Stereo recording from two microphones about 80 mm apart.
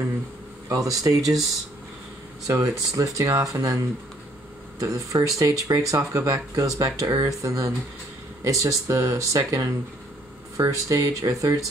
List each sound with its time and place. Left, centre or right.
0.7 s speech: right
2.4 s speech: right
10.6 s speech: right